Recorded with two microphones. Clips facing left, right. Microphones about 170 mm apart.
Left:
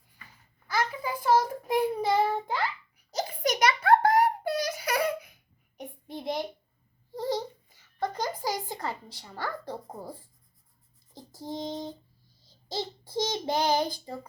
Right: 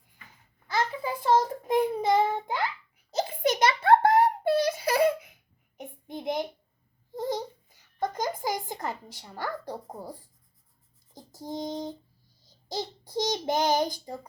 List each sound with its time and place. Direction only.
0.7 s child singing: 25° right (ahead or behind)
7.1 s babbling: 20° right (ahead or behind)
11.3 s child singing: 15° right (ahead or behind)
12.5 s a child's voice: 15° right (ahead or behind)